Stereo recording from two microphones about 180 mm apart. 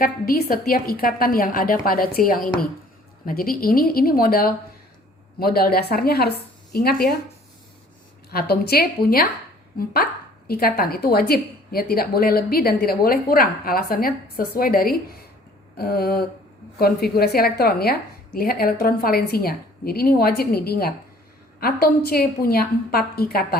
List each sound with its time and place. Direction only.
0.0 s a woman's voice: 55° left (ahead or behind)
8.3 s a woman's voice: 60° left (ahead or behind)